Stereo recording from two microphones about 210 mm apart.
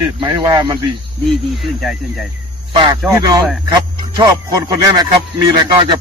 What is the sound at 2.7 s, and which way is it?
A man's voice, 20° right (ahead or behind).